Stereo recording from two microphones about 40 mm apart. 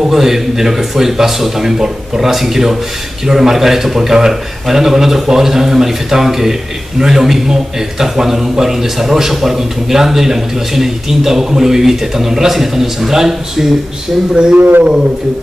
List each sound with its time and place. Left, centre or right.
0.1 s a man's voice: centre
14.3 s speech: right
14.6 s speech: right